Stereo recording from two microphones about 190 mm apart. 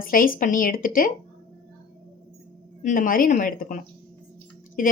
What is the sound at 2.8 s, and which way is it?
A woman's voice, 45° left (ahead or behind).